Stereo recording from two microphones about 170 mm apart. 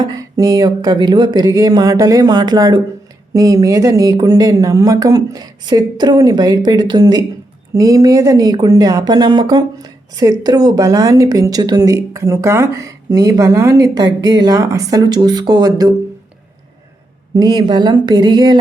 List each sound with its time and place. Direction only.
0.0 s speech: 20° right (ahead or behind)
17.3 s speech: 25° right (ahead or behind)